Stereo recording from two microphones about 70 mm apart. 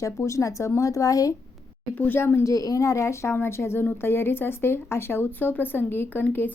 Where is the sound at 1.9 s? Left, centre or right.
Left.